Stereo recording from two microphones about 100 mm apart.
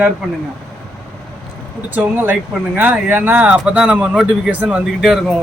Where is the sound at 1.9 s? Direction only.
20° right (ahead or behind); by 5.4 s centre (ahead or behind).